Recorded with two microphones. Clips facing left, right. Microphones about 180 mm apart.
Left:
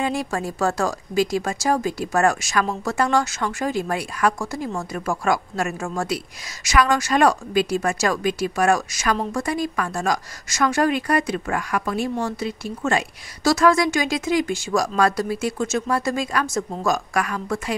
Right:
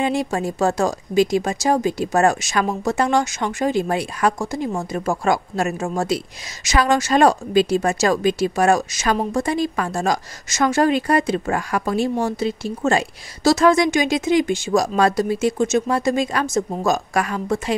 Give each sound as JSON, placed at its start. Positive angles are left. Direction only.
{"t": 0.0, "sound": "speech", "side_deg": -20}